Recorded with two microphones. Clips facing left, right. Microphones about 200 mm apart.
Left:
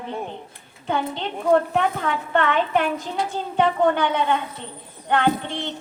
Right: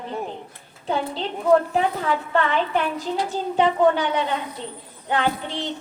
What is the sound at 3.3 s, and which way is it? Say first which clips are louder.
A woman's voice: even; 55° left (ahead or behind).